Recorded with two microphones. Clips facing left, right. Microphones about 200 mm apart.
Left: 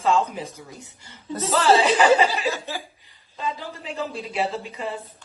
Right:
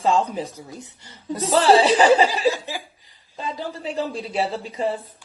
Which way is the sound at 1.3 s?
15° right (ahead or behind).